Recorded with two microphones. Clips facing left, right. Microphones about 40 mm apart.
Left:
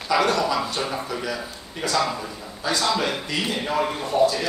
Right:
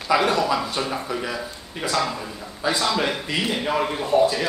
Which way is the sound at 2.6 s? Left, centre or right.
Centre.